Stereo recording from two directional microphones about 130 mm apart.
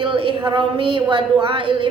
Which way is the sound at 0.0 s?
40° right (ahead or behind).